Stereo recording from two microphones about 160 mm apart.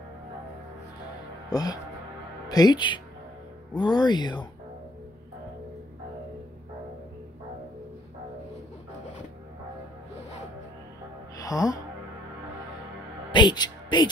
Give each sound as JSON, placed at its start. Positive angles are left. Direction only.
{"t": 1.5, "sound": "speech", "side_deg": 25}
{"t": 11.3, "sound": "music", "side_deg": 20}
{"t": 13.3, "sound": "speech", "side_deg": 30}